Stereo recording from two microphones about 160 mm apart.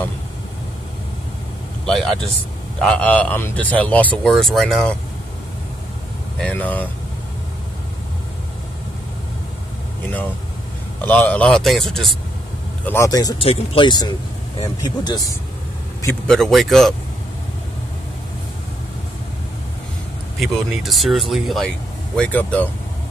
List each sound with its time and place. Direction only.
1.9 s speech: centre (ahead or behind)
6.3 s speech: 5° left (ahead or behind)
11.0 s speech: 10° left (ahead or behind)
12.8 s speech: 15° left (ahead or behind)
13.4 s speech: 35° left (ahead or behind)
16.3 s speech: centre (ahead or behind)
20.3 s speech: centre (ahead or behind)